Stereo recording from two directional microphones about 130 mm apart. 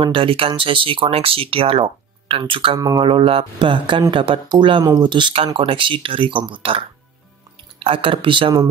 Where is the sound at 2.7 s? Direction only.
30° right (ahead or behind).